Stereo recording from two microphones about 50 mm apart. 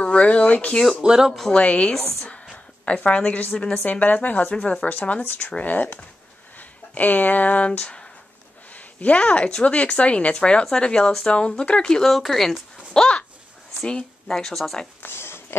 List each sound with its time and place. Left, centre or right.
0.0 s speech: left
1.0 s speech: centre
1.5 s speech: left
2.5 s a sound: left
3.5 s a woman's voice: centre
3.8 s speech: left
7.0 s speech: left; by 12.0 s centre
12.0 s speech: centre
14.3 s speech: centre
15.0 s a sound: left